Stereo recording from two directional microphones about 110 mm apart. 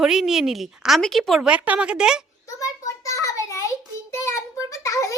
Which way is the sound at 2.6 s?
30° left (ahead or behind).